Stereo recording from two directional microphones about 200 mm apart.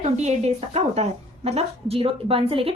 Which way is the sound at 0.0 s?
35° right (ahead or behind).